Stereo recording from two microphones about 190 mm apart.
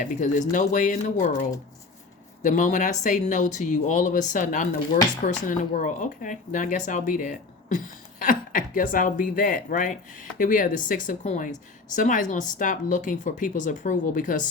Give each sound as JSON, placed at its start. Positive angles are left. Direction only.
{"t": 0.0, "sound": "speech", "side_deg": 40}
{"t": 2.4, "sound": "speech", "side_deg": 40}